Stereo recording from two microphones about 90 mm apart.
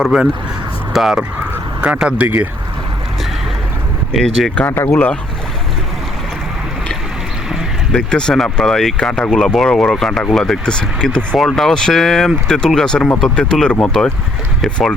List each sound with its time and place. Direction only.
0.0 s speech: 5° right (ahead or behind)
1.8 s speech: 15° right (ahead or behind)
4.5 s speech: 20° left (ahead or behind)
7.9 s speech: 10° left (ahead or behind)